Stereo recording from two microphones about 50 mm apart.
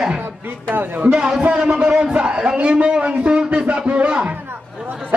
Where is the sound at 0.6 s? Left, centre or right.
Right.